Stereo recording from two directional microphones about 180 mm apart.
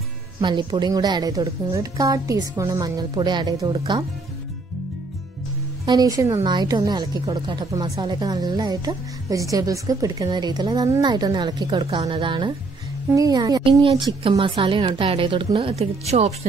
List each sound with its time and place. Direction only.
0.4 s a woman's voice: 25° right (ahead or behind)
5.9 s a woman's voice: 20° right (ahead or behind); by 16.3 s 35° right (ahead or behind)